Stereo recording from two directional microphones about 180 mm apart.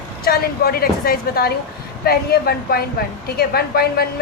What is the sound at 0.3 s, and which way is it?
Speech, 55° left (ahead or behind).